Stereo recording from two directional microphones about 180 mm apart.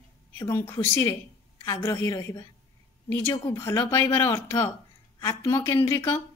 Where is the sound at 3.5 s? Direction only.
15° left (ahead or behind).